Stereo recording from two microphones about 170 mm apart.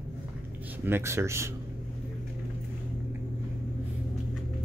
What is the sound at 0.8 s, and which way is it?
Speech, 15° right (ahead or behind).